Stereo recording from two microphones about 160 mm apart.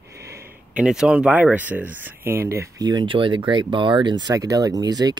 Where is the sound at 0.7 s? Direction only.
5° right (ahead or behind).